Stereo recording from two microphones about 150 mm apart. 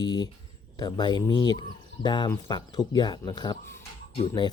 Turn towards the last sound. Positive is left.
turn(degrees=35)  # may be behind; listen again after turning